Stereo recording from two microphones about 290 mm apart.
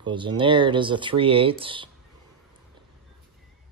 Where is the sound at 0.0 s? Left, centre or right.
Centre.